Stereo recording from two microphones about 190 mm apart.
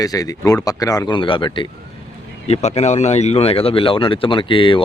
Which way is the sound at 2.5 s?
35° left (ahead or behind).